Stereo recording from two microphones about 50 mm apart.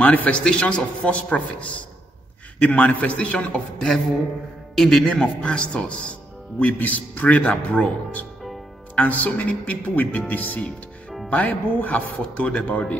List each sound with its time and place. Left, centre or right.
0.0 s speech: left
0.4 s speech: left
4.7 s speech: centre
6.6 s speech: left
8.9 s speech: left